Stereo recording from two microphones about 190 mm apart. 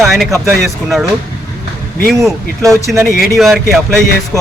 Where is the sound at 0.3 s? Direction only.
15° right (ahead or behind).